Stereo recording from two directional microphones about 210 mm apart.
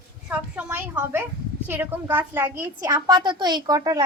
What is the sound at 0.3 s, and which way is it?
A child's voice, 5° right (ahead or behind).